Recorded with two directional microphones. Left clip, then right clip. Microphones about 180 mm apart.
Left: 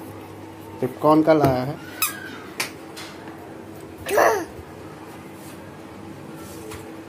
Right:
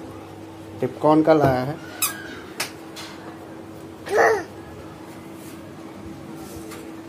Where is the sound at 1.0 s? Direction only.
Centre (ahead or behind).